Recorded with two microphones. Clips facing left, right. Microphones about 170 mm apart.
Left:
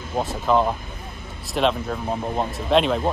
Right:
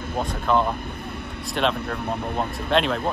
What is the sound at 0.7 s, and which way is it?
Vehicle, 60° right (ahead or behind).